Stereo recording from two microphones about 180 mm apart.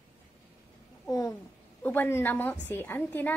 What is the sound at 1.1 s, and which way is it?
A woman's voice, 15° left (ahead or behind).